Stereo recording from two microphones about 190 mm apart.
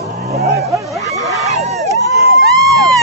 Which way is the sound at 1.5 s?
35° right (ahead or behind).